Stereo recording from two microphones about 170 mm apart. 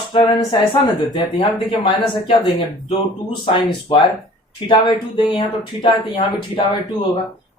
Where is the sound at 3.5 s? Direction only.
30° left (ahead or behind).